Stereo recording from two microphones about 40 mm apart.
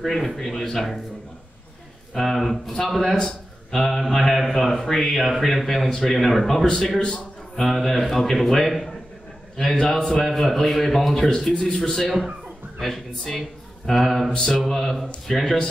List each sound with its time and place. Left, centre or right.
0.0 s a man's voice: centre
2.1 s a man's voice: centre
7.0 s a sound: left
7.6 s a man's voice: centre
11.7 s a man's voice: centre
12.8 s a man's voice: centre